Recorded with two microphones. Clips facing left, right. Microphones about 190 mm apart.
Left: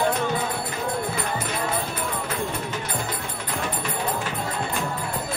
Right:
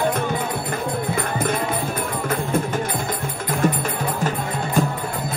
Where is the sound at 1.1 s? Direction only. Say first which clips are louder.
Right 5 dB; 50° right (ahead or behind).